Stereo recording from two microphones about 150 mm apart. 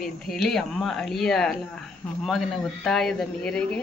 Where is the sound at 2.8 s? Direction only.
5° left (ahead or behind).